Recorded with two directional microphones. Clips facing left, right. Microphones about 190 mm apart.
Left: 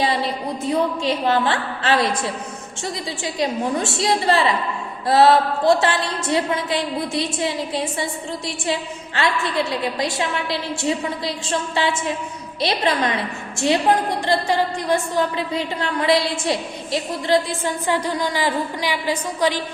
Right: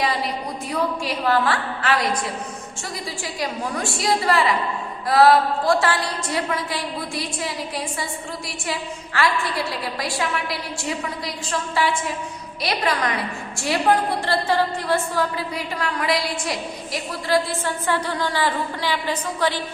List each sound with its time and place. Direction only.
0.0 s a sound: 30° left (ahead or behind)
0.7 s a woman's voice: 25° left (ahead or behind)
3.3 s a woman's voice: 25° left (ahead or behind)